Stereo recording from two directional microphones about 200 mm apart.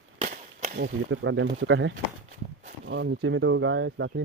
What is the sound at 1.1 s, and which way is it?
Speech, 70° right (ahead or behind).